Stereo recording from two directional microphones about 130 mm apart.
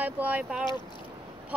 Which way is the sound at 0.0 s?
10° right (ahead or behind).